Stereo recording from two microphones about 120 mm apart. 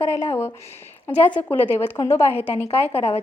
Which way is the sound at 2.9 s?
55° left (ahead or behind).